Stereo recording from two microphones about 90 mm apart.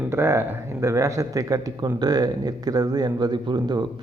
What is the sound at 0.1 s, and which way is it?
A man's voice, 30° right (ahead or behind).